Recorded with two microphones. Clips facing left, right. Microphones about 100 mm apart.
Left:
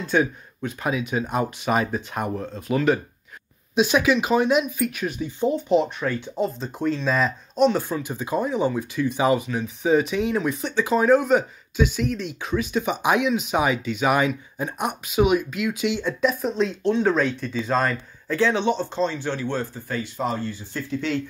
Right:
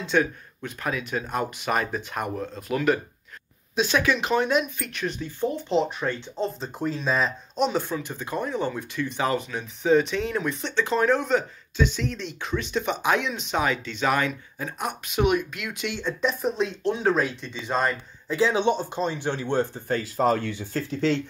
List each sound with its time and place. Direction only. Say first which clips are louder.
0.0 s speech: left 2 dB; 10° left (ahead or behind)
3.7 s speech: left 4 dB; 15° left (ahead or behind)
6.2 s speech: left 3 dB; 10° left (ahead or behind)
6.6 s speech: left 4 dB; 5° right (ahead or behind); by 15.0 s 15° left (ahead or behind)
15.0 s speech: left 3 dB; 5° left (ahead or behind); by 19.8 s 20° right (ahead or behind)
20.0 s speech: right 4 dB; 40° right (ahead or behind)
20.3 s speech: even; 65° right (ahead or behind)
20.7 s speech: right 2 dB; 30° right (ahead or behind)